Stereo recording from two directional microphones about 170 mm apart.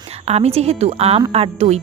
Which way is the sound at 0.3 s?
40° right (ahead or behind).